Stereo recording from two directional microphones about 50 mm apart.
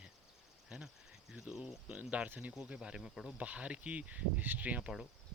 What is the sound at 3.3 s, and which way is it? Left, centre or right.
Speech, right.